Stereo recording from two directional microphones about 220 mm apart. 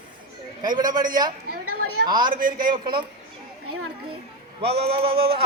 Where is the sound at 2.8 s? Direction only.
20° right (ahead or behind).